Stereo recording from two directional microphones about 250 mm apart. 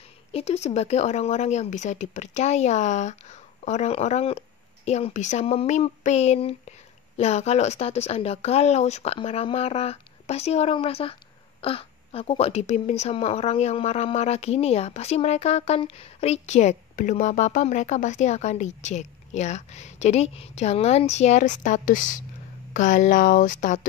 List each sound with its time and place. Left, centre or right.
0.3 s a woman's voice: left